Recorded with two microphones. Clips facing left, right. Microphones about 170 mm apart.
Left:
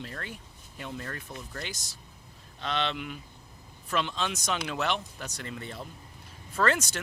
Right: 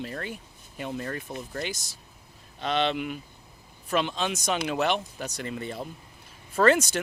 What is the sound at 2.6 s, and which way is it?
Speech, 15° right (ahead or behind).